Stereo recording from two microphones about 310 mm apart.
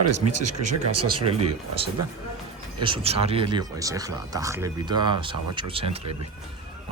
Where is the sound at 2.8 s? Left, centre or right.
Centre.